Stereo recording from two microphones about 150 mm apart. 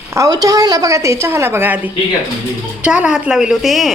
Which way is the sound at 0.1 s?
25° right (ahead or behind).